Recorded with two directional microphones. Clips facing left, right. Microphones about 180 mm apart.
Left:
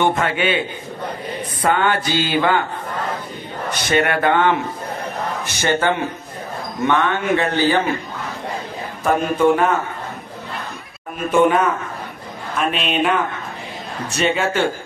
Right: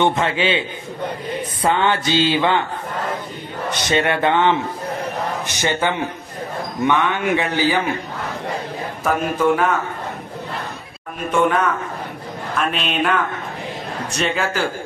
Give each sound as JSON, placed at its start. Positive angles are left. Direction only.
{"t": 0.0, "sound": "mantra", "side_deg": -25}
{"t": 3.7, "sound": "mantra", "side_deg": -25}
{"t": 5.5, "sound": "a man's voice", "side_deg": -15}
{"t": 9.0, "sound": "a man's voice", "side_deg": 0}
{"t": 11.3, "sound": "a man's voice", "side_deg": 5}